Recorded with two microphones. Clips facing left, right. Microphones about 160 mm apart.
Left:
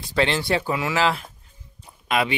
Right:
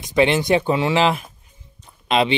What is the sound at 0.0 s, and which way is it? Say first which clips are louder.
Speech: right 5 dB; 20° right (ahead or behind).